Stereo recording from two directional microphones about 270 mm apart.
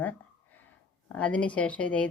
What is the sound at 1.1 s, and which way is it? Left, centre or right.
Speech, centre.